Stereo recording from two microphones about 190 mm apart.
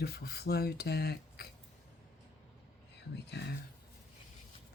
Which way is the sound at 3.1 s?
60° left (ahead or behind).